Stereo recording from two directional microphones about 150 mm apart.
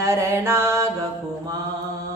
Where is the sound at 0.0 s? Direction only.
20° right (ahead or behind).